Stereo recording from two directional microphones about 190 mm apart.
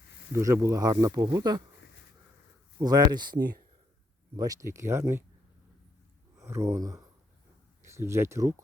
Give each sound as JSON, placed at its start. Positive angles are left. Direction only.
{"t": 0.3, "sound": "speech", "side_deg": -15}
{"t": 2.7, "sound": "speech", "side_deg": -20}
{"t": 4.4, "sound": "speech", "side_deg": -20}
{"t": 6.3, "sound": "speech", "side_deg": -15}